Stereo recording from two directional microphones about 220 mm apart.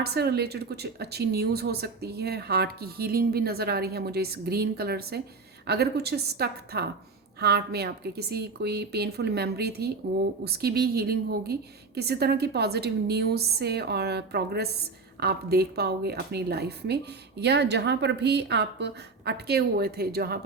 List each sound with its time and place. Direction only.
0.0 s speech: 45° right (ahead or behind)